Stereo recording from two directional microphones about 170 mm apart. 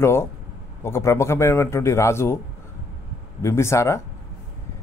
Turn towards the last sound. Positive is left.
turn(degrees=15)  # may be behind; listen again after turning